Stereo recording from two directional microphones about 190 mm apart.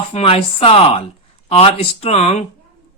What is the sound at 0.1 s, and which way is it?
Speech, 30° left (ahead or behind).